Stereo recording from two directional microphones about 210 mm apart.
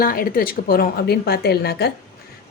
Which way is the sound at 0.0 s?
45° left (ahead or behind).